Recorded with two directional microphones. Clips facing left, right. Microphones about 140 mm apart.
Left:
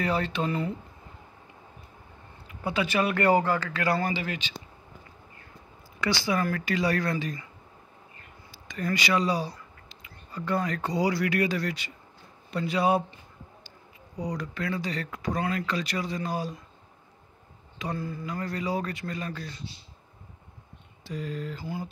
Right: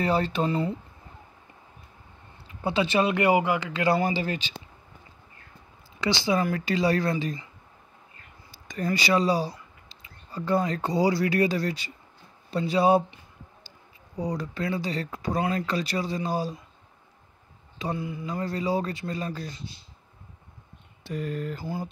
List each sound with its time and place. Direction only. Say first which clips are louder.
0.0 s speech: right 3 dB; 35° right (ahead or behind)
2.4 s a man's voice: right 3 dB; 25° right (ahead or behind)
5.9 s a man's voice: right 2 dB; 25° right (ahead or behind)
8.5 s a sound: right 3 dB; 40° right (ahead or behind)
8.8 s speech: right 3 dB; 30° right (ahead or behind)
14.1 s speech: right 3 dB; 25° right (ahead or behind)
17.7 s a man's voice: right 2 dB; 20° right (ahead or behind)
21.0 s speech: right 3 dB; 55° right (ahead or behind)